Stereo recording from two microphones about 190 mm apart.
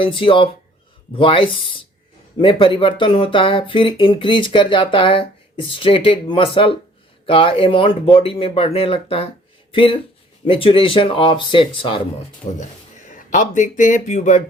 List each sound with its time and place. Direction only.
0.0 s speech: 25° left (ahead or behind)
13.1 s speech: 40° left (ahead or behind)